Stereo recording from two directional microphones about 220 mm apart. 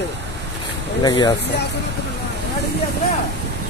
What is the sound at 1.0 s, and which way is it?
Speech, 20° left (ahead or behind).